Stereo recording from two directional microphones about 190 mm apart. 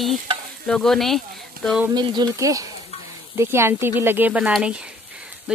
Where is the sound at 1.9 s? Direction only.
20° right (ahead or behind); by 5.6 s 5° right (ahead or behind).